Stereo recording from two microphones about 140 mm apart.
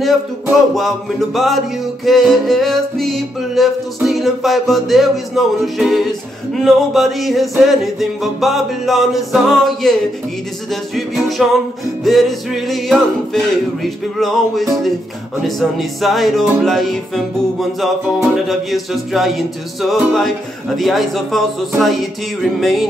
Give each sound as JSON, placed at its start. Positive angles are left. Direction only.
{"t": 0.7, "sound": "music", "side_deg": 0}